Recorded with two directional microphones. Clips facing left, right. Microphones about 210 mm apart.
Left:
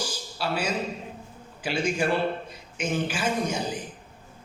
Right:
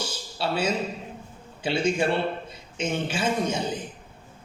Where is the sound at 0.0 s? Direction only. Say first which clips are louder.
Right 1 dB; 25° right (ahead or behind).